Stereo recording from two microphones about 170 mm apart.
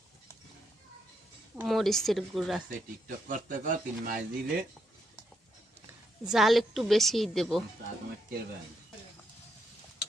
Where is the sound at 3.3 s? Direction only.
50° right (ahead or behind).